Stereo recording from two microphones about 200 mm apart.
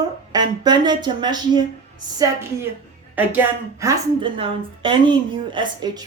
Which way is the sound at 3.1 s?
10° right (ahead or behind).